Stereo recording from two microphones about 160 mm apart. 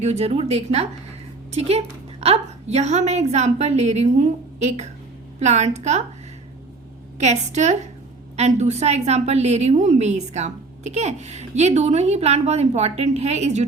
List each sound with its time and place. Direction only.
0.0 s a woman's voice: 40° right (ahead or behind)
7.2 s a woman's voice: 45° right (ahead or behind)